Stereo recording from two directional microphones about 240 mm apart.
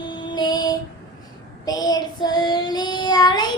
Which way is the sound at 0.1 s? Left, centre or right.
Centre.